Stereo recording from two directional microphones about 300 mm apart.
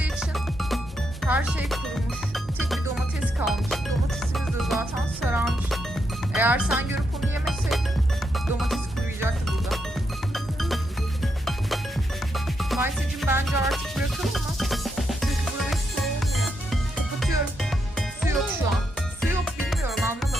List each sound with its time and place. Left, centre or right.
0.0 s music: centre